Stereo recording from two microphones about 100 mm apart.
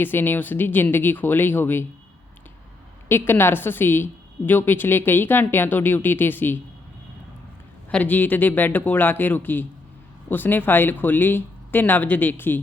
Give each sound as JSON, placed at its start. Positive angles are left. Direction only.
{"t": 0.0, "sound": "a woman's voice", "side_deg": 20}
{"t": 3.1, "sound": "a woman's voice", "side_deg": 25}
{"t": 7.9, "sound": "a woman's voice", "side_deg": 15}